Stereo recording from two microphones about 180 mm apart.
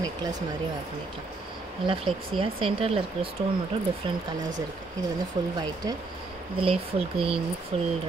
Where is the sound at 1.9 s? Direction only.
30° right (ahead or behind).